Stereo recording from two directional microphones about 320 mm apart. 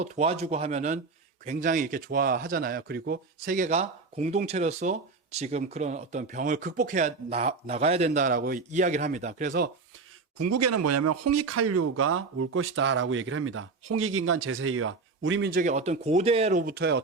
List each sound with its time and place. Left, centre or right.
0.0 s speech: centre
10.3 s speech: right